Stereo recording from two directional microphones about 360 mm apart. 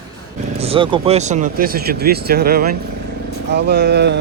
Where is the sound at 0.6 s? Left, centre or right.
Centre.